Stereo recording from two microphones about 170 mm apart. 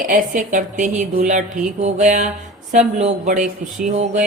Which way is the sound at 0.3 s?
45° right (ahead or behind).